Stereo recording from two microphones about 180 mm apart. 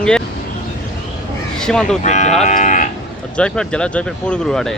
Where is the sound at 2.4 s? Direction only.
45° left (ahead or behind).